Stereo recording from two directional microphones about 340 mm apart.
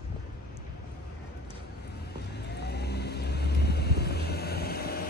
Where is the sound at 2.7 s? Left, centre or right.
Left.